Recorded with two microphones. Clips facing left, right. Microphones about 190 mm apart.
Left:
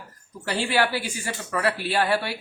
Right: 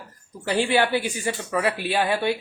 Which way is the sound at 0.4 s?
20° right (ahead or behind).